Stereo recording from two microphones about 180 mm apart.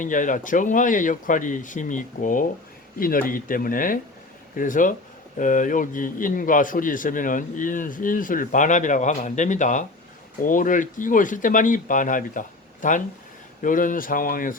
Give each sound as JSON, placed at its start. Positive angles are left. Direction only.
{"t": 0.0, "sound": "a man's voice", "side_deg": 45}